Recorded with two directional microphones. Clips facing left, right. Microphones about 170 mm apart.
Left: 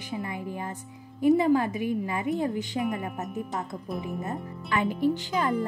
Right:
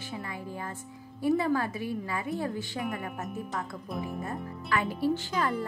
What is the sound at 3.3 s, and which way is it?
Speech, centre (ahead or behind).